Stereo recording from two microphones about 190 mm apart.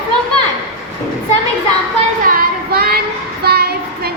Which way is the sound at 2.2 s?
50° right (ahead or behind).